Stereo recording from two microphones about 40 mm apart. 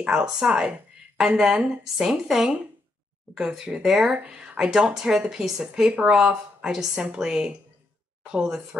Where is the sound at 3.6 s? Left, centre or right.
Centre.